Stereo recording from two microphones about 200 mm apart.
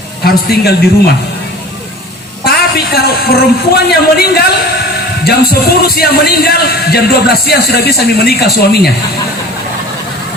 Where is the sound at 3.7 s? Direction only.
55° left (ahead or behind).